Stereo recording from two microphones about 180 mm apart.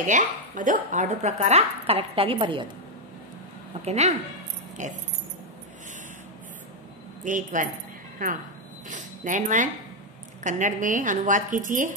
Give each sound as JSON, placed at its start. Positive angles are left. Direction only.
{"t": 0.0, "sound": "speech", "side_deg": -45}
{"t": 3.8, "sound": "a woman's voice", "side_deg": -35}
{"t": 7.2, "sound": "a woman's voice", "side_deg": -45}